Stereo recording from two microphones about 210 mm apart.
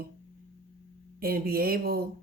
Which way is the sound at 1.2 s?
45° right (ahead or behind).